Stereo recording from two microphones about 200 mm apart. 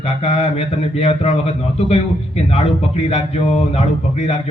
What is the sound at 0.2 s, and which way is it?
A man's voice, 30° left (ahead or behind).